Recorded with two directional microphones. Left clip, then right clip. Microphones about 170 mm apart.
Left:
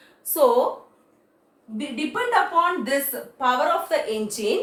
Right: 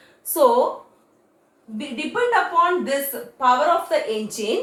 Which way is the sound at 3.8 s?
15° right (ahead or behind).